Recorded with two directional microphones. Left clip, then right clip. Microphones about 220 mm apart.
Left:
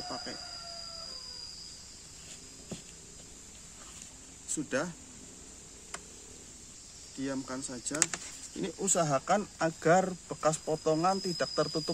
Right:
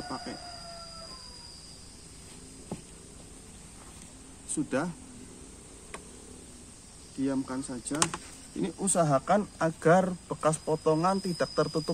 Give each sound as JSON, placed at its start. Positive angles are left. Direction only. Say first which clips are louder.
{"t": 0.1, "sound": "a sound", "louder": "right 1 dB", "side_deg": 10}
{"t": 4.5, "sound": "speech", "louder": "right 2 dB", "side_deg": 15}
{"t": 7.2, "sound": "speech", "louder": "right 5 dB", "side_deg": 20}
{"t": 8.5, "sound": "speech", "louder": "right 3 dB", "side_deg": 10}